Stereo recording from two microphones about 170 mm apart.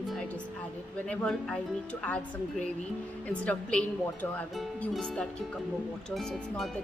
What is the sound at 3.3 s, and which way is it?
A woman's voice, 5° left (ahead or behind).